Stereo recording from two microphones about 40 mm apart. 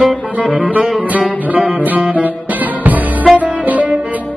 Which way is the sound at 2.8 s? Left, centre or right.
Right.